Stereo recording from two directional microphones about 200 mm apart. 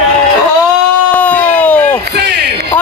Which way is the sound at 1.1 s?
5° left (ahead or behind).